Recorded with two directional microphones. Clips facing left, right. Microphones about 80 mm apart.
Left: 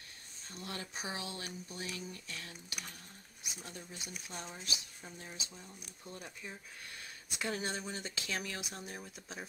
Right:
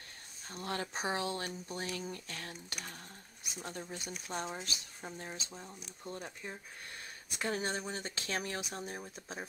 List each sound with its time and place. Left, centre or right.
0.5 s speech: right